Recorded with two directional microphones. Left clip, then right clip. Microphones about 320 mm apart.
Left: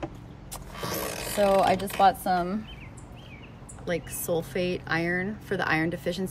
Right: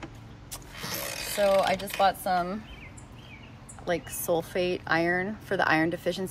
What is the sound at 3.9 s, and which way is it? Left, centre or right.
Speech, centre.